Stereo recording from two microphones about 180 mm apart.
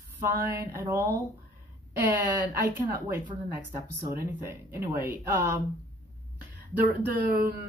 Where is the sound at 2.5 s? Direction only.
15° right (ahead or behind).